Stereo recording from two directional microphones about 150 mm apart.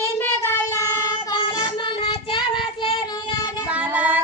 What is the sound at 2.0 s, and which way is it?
Child singing, 35° left (ahead or behind).